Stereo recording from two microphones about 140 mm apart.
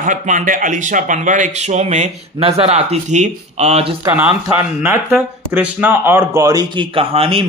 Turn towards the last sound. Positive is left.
turn(degrees=-45)  # may be behind; listen again after turning